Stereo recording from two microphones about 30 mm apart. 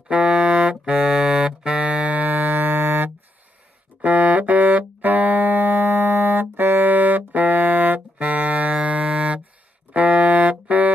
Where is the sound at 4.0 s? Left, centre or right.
Right.